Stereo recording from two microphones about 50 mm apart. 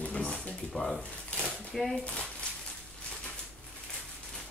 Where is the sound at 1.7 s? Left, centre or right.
Centre.